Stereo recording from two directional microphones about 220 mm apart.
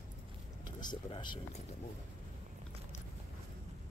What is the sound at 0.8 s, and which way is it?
Speech, 20° left (ahead or behind).